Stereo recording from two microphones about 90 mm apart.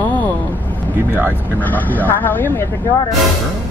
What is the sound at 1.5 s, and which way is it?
Speech, 20° left (ahead or behind).